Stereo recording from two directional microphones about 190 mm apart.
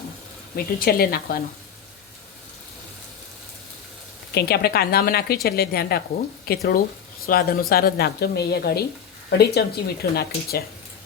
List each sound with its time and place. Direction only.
0.5 s speech: 55° left (ahead or behind)
4.4 s speech: 55° left (ahead or behind)